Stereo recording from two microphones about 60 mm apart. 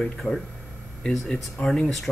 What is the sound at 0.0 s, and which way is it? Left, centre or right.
Speech, centre.